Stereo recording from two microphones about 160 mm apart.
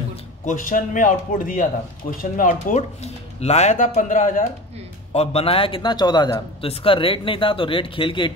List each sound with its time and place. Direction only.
0.1 s speech: 50° left (ahead or behind)
3.0 s speech: 40° left (ahead or behind)
5.1 s a man's voice: 40° left (ahead or behind)